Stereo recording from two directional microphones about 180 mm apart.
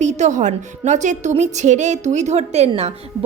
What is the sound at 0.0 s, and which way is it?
A woman's voice, 40° right (ahead or behind).